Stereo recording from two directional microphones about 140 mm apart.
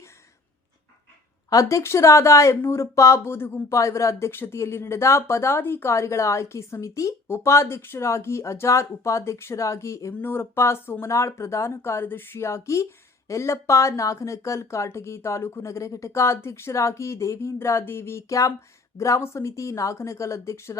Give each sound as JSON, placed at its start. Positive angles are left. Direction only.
{"t": 1.5, "sound": "speech", "side_deg": 25}